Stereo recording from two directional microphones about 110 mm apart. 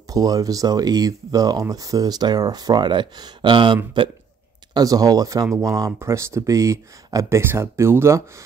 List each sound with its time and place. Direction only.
0.1 s speech: 35° right (ahead or behind)
4.7 s speech: 35° right (ahead or behind)